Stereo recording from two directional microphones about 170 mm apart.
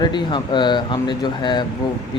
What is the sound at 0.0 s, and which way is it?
Speech, 25° left (ahead or behind).